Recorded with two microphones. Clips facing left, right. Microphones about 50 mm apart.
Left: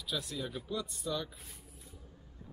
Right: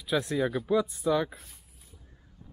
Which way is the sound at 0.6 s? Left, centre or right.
Centre.